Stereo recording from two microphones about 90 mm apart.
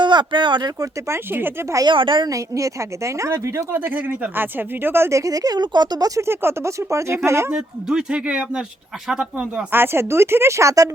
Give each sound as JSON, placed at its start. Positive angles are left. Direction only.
{"t": 0.0, "sound": "speech", "side_deg": -60}
{"t": 0.8, "sound": "speech", "side_deg": -30}
{"t": 1.9, "sound": "a woman's voice", "side_deg": -65}
{"t": 2.3, "sound": "speech", "side_deg": -35}
{"t": 3.8, "sound": "speech", "side_deg": -20}
{"t": 6.2, "sound": "speech", "side_deg": -30}
{"t": 7.5, "sound": "speech", "side_deg": -10}
{"t": 9.7, "sound": "speech", "side_deg": -25}